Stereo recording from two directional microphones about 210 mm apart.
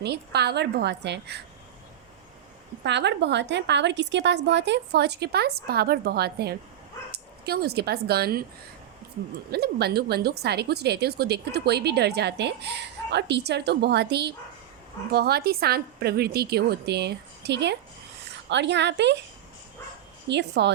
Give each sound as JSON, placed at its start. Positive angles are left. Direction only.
{"t": 0.0, "sound": "a woman's voice", "side_deg": -50}
{"t": 2.8, "sound": "a woman's voice", "side_deg": -55}
{"t": 9.5, "sound": "a woman's voice", "side_deg": -50}
{"t": 20.2, "sound": "a woman's voice", "side_deg": -55}